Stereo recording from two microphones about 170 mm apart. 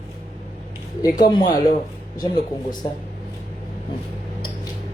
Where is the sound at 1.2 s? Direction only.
25° left (ahead or behind).